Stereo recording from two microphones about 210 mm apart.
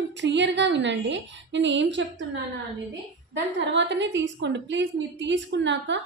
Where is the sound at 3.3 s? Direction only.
60° right (ahead or behind).